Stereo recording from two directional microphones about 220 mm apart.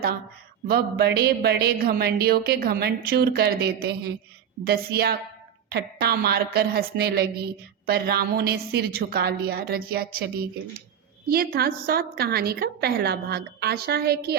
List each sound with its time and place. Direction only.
0.7 s a woman's voice: 45° right (ahead or behind)